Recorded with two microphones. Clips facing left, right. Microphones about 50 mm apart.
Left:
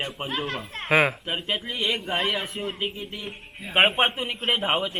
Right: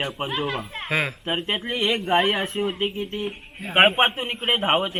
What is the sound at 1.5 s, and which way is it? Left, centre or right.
Speech, right.